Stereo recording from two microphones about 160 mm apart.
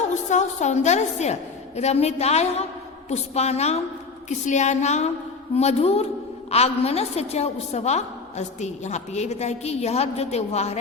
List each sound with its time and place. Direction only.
0.1 s a woman's voice: 45° left (ahead or behind)